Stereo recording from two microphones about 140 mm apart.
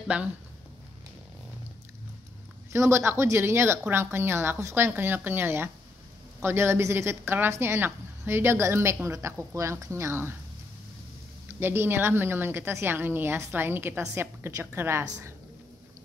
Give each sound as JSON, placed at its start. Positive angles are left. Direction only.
{"t": 0.1, "sound": "a woman's voice", "side_deg": -10}
{"t": 2.7, "sound": "a woman's voice", "side_deg": -20}
{"t": 11.4, "sound": "a woman's voice", "side_deg": -15}